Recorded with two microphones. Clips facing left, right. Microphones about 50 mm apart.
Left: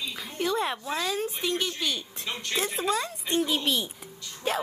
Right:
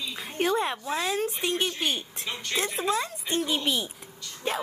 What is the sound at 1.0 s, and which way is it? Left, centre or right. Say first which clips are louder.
Speech: right 2 dB; right.